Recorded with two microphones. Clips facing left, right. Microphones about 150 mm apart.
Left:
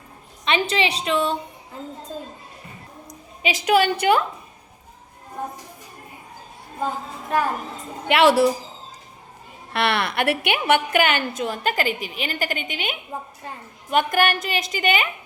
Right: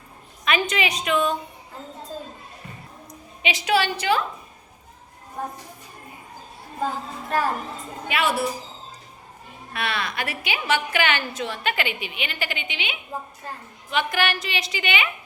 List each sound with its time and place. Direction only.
0.4 s a woman's voice: 30° left (ahead or behind)
3.4 s a woman's voice: 45° left (ahead or behind)
8.0 s speech: 80° left
9.7 s a woman's voice: 65° left (ahead or behind); by 15.1 s 45° left (ahead or behind)